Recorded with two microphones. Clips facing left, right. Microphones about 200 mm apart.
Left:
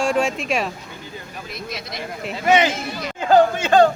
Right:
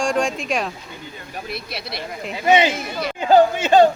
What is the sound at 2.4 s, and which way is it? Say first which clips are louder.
Speech: right 1 dB; 20° right (ahead or behind).